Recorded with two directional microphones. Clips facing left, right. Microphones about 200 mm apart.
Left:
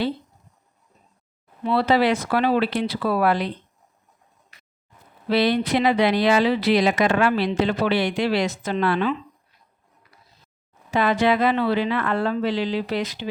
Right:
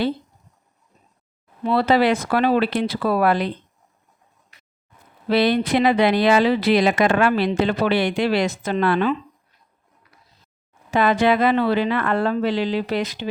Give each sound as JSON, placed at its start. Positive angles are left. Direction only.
{"t": 1.6, "sound": "speech", "side_deg": -45}
{"t": 5.3, "sound": "speech", "side_deg": -50}
{"t": 10.9, "sound": "speech", "side_deg": -50}